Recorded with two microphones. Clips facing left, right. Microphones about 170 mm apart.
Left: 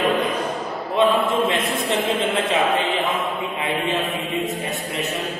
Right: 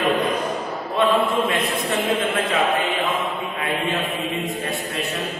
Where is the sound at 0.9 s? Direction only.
20° left (ahead or behind).